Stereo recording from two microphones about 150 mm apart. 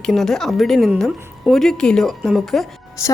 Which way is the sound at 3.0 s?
20° left (ahead or behind).